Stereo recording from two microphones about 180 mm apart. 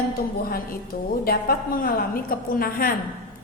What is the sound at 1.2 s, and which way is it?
A woman's voice, 55° left (ahead or behind).